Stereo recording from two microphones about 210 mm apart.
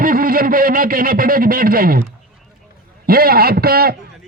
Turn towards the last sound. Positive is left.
turn(degrees=-45)  # may be behind; listen again after turning